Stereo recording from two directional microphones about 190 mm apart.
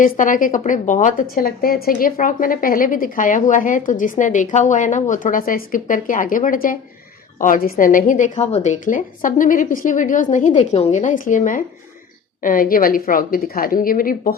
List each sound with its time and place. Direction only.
0.0 s a woman's voice: 45° left (ahead or behind)